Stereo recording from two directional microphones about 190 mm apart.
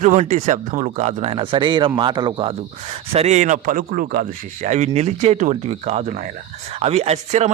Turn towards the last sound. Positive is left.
turn(degrees=-35)  # may be behind; listen again after turning